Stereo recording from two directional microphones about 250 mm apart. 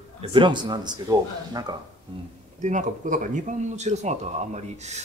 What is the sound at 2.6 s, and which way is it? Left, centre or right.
Speech, right.